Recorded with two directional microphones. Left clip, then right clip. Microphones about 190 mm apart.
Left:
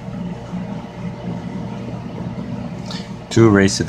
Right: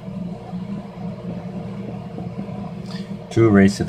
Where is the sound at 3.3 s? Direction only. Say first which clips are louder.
Left 3 dB; 5° right (ahead or behind).